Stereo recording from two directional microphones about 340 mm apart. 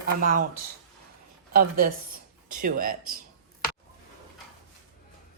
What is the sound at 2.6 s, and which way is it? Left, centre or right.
Speech, right.